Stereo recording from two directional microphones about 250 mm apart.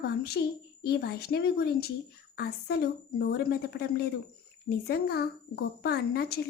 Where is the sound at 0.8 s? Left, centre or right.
Left.